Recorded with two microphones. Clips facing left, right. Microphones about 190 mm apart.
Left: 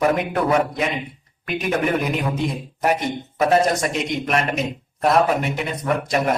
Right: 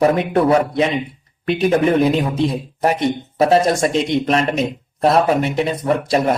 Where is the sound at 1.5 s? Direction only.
30° right (ahead or behind).